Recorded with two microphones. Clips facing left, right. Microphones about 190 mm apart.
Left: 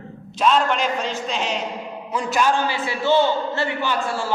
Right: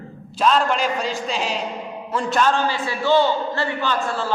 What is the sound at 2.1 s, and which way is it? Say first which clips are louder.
Speech: right 1 dB; centre (ahead or behind).